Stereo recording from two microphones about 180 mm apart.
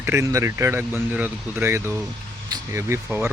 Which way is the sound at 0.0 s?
15° right (ahead or behind).